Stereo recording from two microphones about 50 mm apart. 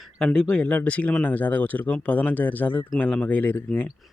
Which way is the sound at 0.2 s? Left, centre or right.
Centre.